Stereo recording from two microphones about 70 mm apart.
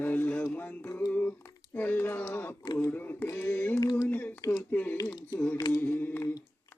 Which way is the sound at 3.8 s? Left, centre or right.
Left.